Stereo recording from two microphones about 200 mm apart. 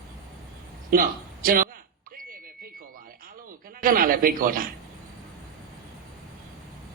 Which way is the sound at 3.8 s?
45° right (ahead or behind).